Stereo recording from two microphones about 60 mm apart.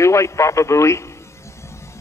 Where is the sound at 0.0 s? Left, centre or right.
Left.